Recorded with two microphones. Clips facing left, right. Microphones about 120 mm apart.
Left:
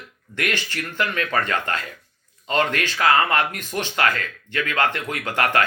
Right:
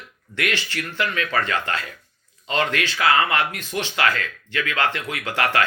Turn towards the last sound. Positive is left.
turn(degrees=45)  # may be behind; listen again after turning